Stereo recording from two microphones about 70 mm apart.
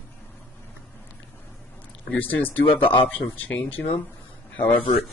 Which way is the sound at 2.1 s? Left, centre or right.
Left.